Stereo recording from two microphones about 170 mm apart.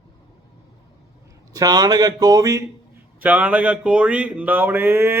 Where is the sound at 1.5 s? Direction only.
25° right (ahead or behind).